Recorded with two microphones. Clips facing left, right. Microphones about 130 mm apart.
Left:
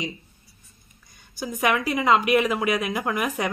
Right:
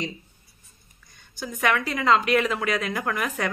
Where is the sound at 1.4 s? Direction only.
15° left (ahead or behind).